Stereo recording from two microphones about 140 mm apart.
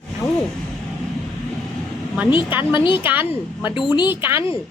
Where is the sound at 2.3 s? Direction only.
35° left (ahead or behind).